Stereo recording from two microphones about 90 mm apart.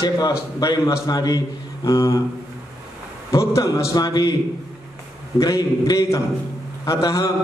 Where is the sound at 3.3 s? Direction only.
35° left (ahead or behind).